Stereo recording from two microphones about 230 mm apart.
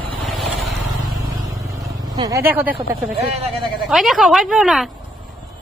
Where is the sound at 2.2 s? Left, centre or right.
Centre.